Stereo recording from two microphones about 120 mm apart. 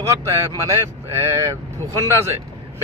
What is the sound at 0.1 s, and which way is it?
Speech, 25° right (ahead or behind).